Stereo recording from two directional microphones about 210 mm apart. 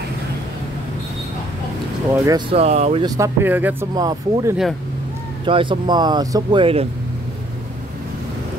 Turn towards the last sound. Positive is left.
turn(degrees=-25)  # may be behind; listen again after turning